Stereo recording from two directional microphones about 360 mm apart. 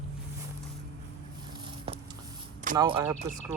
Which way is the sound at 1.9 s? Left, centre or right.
Centre.